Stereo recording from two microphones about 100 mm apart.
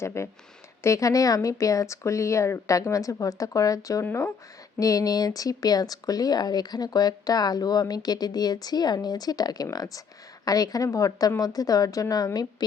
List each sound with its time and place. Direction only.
0.0 s speech: 25° left (ahead or behind)
4.0 s speech: 25° left (ahead or behind)
4.8 s speech: 35° left (ahead or behind)